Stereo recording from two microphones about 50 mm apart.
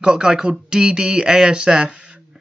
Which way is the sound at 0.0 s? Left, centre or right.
Centre.